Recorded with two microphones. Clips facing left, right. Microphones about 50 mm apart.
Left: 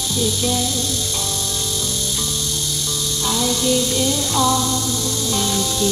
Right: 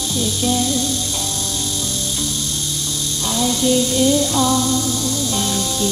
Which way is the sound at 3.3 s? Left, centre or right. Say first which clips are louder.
Right 3 dB; centre.